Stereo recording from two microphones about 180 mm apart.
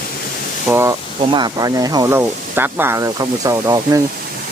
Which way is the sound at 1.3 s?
25° right (ahead or behind).